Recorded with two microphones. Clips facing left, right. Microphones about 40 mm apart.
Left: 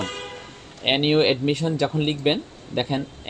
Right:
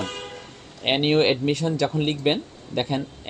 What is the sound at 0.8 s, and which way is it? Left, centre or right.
Speech, centre.